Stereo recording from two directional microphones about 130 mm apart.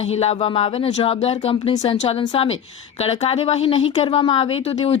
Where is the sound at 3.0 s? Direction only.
50° left (ahead or behind).